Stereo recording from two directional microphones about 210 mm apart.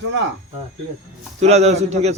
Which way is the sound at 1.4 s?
30° right (ahead or behind).